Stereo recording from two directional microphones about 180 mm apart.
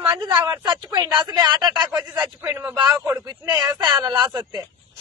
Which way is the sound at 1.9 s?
5° right (ahead or behind).